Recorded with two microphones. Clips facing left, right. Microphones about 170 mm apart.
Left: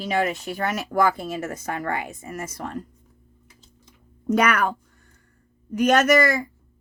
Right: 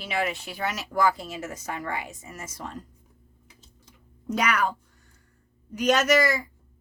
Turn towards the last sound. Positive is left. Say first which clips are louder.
# left 4 dB
turn(degrees=50)  # may be behind; listen again after turning